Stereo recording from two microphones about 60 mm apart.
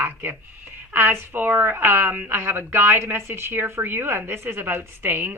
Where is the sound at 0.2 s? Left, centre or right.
Right.